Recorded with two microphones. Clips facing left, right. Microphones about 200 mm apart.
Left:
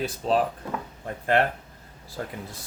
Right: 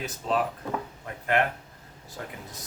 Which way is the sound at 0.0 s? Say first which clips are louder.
Left 4 dB; 35° left (ahead or behind).